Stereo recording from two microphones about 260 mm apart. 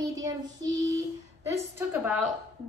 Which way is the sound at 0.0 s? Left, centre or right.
Centre.